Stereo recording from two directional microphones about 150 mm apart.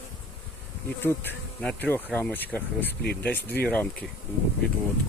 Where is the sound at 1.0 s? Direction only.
15° left (ahead or behind).